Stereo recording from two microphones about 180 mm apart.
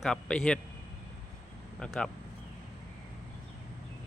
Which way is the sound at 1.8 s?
5° left (ahead or behind).